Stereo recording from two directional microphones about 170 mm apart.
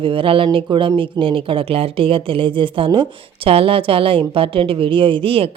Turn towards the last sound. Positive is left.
turn(degrees=-35)  # may be behind; listen again after turning